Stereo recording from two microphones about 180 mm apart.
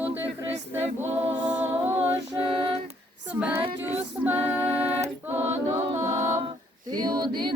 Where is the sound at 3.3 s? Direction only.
10° right (ahead or behind).